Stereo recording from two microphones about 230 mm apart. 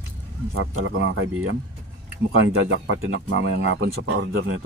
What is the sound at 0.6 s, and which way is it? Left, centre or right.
Speech, right.